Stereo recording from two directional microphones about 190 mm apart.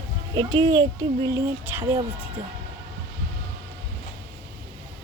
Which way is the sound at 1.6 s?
10° right (ahead or behind).